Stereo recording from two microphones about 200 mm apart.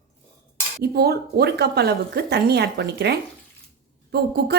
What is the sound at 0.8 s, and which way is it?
A woman's voice, 50° right (ahead or behind).